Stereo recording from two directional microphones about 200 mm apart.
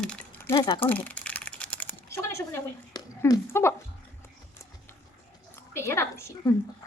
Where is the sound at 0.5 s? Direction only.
25° left (ahead or behind).